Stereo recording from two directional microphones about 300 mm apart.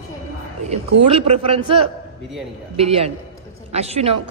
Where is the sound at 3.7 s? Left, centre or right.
Right.